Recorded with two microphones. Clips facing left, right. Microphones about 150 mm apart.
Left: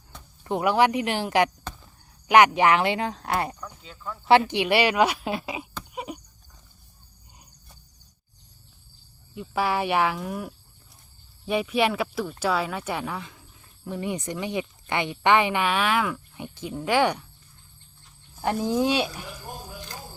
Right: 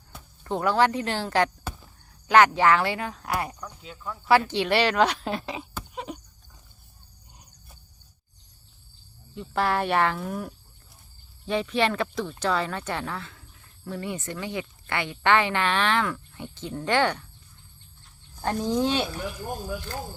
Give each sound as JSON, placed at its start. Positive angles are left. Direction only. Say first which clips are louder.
{"t": 0.4, "sound": "speech", "louder": "left 1 dB", "side_deg": 15}
{"t": 1.7, "sound": "a sound", "louder": "right 2 dB", "side_deg": -10}
{"t": 2.2, "sound": "speech", "louder": "left 1 dB", "side_deg": 15}
{"t": 3.6, "sound": "speech", "louder": "right 1 dB", "side_deg": -5}
{"t": 4.3, "sound": "speech", "louder": "left 2 dB", "side_deg": 20}
{"t": 5.9, "sound": "a sound", "louder": "left 1 dB", "side_deg": 10}
{"t": 9.3, "sound": "speech", "louder": "even", "side_deg": 5}
{"t": 18.4, "sound": "speech", "louder": "left 1 dB", "side_deg": 10}